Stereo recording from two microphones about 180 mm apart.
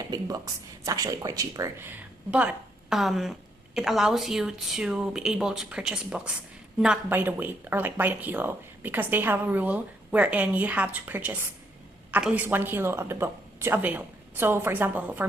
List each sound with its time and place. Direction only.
0.1 s speech: 20° right (ahead or behind)